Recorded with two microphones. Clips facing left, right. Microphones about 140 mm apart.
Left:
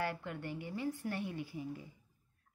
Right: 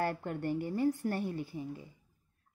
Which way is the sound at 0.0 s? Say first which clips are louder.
Right 5 dB; 45° right (ahead or behind).